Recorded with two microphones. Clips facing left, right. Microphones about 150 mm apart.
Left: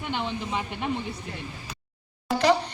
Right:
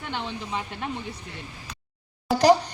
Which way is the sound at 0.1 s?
5° left (ahead or behind).